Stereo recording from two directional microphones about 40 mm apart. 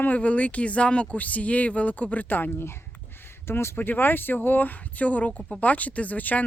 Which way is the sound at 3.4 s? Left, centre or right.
Left.